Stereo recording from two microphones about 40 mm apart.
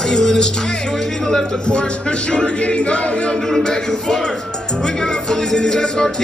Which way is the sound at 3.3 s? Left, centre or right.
Centre.